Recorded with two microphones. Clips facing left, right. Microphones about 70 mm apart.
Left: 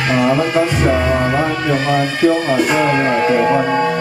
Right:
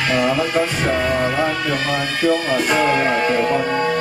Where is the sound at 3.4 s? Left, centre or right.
Left.